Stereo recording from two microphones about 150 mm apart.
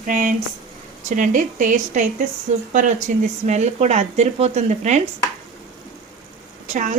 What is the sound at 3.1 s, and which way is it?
A woman's voice, 60° right (ahead or behind).